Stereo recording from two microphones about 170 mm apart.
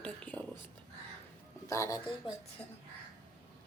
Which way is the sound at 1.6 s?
20° left (ahead or behind).